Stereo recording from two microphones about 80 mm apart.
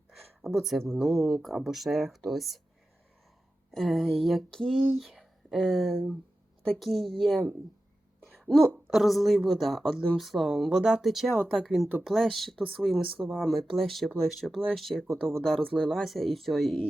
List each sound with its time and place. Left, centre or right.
0.5 s speech: centre
3.7 s a woman's voice: centre
15.0 s speech: right
15.4 s speech: centre